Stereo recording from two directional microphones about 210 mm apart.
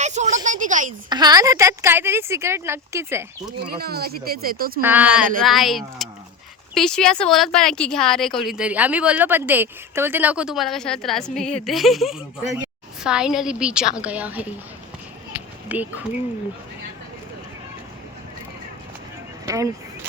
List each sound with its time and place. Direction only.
0.0 s a sound: 35° right (ahead or behind)
1.1 s speech: 20° right (ahead or behind)
3.6 s speech: 45° right (ahead or behind)
4.8 s speech: 10° right (ahead or behind)
15.7 s speech: 5° right (ahead or behind)
19.5 s vehicle: 15° right (ahead or behind)